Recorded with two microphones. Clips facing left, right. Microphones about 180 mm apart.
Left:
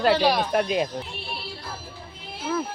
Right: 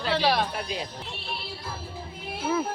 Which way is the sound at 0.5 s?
60° left (ahead or behind).